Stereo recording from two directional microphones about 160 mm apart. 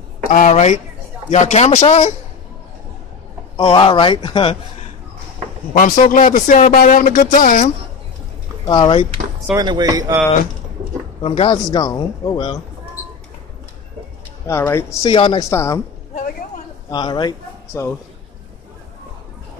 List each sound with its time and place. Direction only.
0.3 s speech: 50° left (ahead or behind)
3.5 s speech: 30° left (ahead or behind)
5.7 s speech: 55° left (ahead or behind)
8.6 s speech: 30° left (ahead or behind)
9.5 s speech: 25° right (ahead or behind)
11.2 s speech: 30° left (ahead or behind)
14.4 s speech: 15° left (ahead or behind)
15.0 s speech: 30° left (ahead or behind)
15.5 s speech: 15° left (ahead or behind)
16.9 s speech: 25° left (ahead or behind)